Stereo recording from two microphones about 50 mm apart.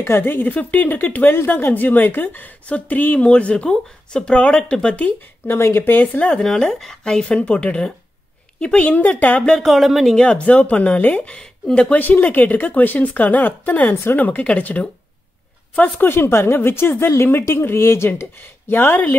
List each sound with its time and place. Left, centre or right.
0.0 s speech: left
5.6 s speech: left
5.9 s speech: left
6.4 s speech: centre; by 9.4 s left
9.6 s speech: centre
10.1 s speech: left
12.0 s speech: left
16.0 s speech: left
18.4 s speech: left